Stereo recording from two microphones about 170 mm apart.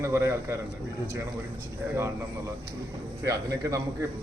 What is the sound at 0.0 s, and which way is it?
Speech, 15° right (ahead or behind).